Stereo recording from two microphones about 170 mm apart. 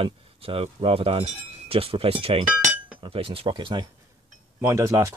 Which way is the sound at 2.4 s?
5° right (ahead or behind).